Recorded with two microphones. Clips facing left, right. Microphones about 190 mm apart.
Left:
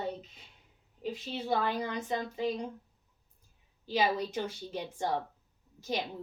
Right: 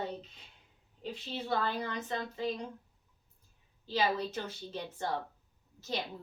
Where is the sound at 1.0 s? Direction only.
10° left (ahead or behind).